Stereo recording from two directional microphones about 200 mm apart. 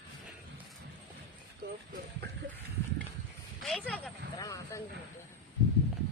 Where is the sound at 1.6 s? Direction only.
55° right (ahead or behind).